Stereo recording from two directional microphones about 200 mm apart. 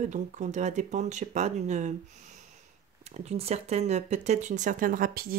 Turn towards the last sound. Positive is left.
turn(degrees=-45)  # may be behind; listen again after turning